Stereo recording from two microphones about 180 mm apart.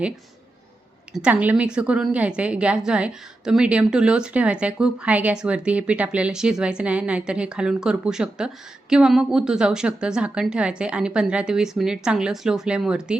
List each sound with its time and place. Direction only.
1.1 s a woman's voice: 5° right (ahead or behind)